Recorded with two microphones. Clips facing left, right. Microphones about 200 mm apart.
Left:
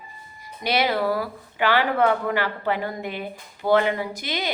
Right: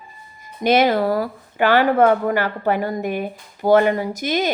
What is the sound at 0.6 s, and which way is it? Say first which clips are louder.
Speech: right 6 dB; 50° right (ahead or behind).